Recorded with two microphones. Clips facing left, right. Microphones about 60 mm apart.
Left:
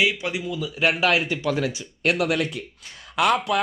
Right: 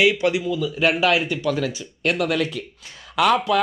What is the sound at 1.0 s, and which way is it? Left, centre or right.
Speech, left.